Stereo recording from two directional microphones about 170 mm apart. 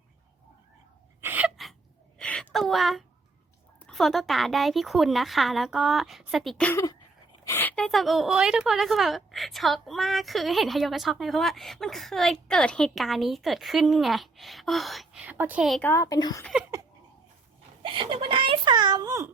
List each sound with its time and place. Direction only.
1.2 s gasp: 10° right (ahead or behind)
2.1 s a sound: 5° left (ahead or behind)
3.8 s a woman's voice: 5° left (ahead or behind)
15.8 s a woman's voice: 15° left (ahead or behind)
17.8 s giggle: 30° right (ahead or behind)